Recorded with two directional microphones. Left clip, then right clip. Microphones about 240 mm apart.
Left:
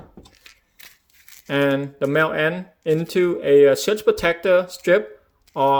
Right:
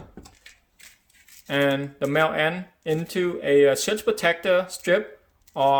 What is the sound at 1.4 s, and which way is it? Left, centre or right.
Speech, left.